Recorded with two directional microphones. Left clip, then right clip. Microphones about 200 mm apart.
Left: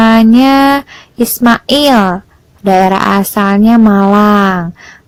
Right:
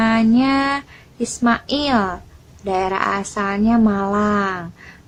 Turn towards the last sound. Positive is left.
turn(degrees=40)  # may be behind; listen again after turning